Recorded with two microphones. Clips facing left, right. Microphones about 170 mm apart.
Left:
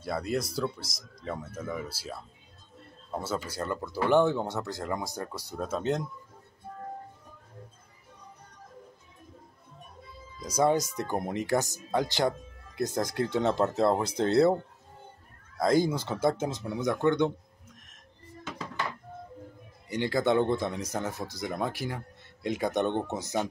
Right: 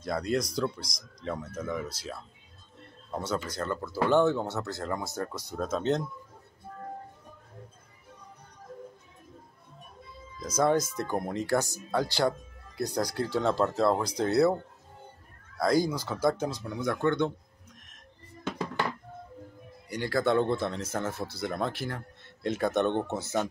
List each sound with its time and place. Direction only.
0.0 s speech: 5° left (ahead or behind)
10.4 s speech: 15° left (ahead or behind)
15.6 s speech: 20° left (ahead or behind)
19.9 s speech: 20° left (ahead or behind)